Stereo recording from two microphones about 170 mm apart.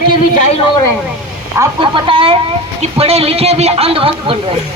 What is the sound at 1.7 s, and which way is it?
A woman's voice, 30° right (ahead or behind).